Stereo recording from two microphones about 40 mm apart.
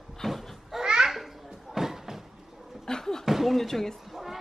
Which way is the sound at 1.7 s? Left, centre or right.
Centre.